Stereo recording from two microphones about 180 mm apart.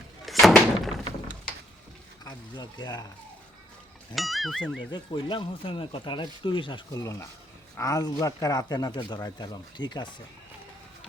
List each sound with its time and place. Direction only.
0.3 s thunk: centre (ahead or behind)
2.2 s speech: 20° left (ahead or behind)
4.1 s speech: centre (ahead or behind)
4.9 s speech: 25° left (ahead or behind)